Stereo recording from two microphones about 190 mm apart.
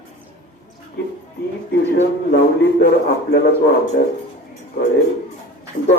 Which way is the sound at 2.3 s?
60° left (ahead or behind).